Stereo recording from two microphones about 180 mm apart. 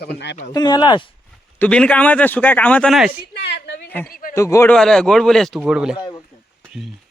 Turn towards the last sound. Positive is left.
turn(degrees=-5)  # may be behind; listen again after turning